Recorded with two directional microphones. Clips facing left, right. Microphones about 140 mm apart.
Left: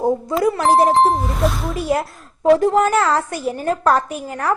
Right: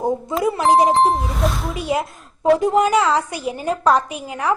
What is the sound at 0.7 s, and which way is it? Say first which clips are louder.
Speech: even; 15° right (ahead or behind).